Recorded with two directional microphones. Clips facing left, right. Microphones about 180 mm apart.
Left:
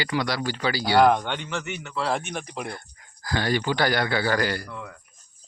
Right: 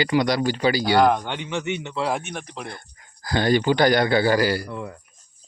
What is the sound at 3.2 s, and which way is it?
A man's voice, 25° right (ahead or behind).